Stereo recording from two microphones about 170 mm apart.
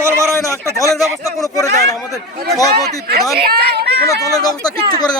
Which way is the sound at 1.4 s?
20° left (ahead or behind).